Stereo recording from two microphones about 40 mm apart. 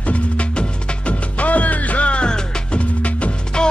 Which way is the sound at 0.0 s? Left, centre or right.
Left.